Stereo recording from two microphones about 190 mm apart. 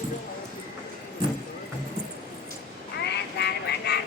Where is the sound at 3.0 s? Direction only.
60° left (ahead or behind).